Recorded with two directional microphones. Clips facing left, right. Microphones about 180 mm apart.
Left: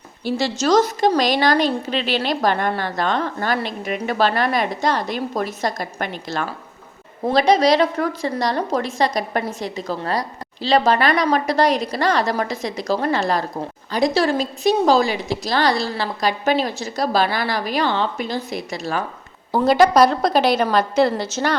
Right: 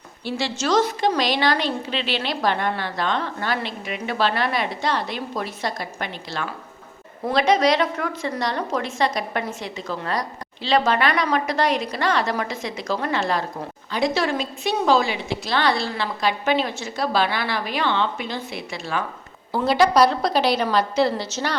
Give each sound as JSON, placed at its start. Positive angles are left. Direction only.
{"t": 0.3, "sound": "a woman's voice", "side_deg": 40}
{"t": 7.3, "sound": "a woman's voice", "side_deg": 35}